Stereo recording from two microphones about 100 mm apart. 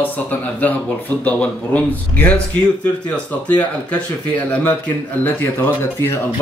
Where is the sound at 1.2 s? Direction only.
15° left (ahead or behind).